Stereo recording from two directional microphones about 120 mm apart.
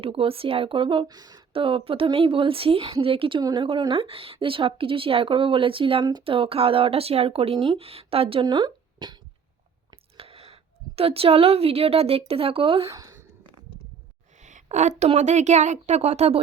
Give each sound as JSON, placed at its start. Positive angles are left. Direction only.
{"t": 0.0, "sound": "speech", "side_deg": -50}
{"t": 1.0, "sound": "speech", "side_deg": -35}
{"t": 1.5, "sound": "speech", "side_deg": -50}
{"t": 6.2, "sound": "speech", "side_deg": -50}
{"t": 10.2, "sound": "a woman's voice", "side_deg": -50}
{"t": 12.9, "sound": "speech", "side_deg": -30}
{"t": 14.3, "sound": "a woman's voice", "side_deg": -85}